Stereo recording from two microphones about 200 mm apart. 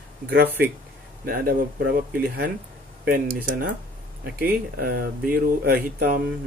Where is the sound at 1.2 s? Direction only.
45° right (ahead or behind).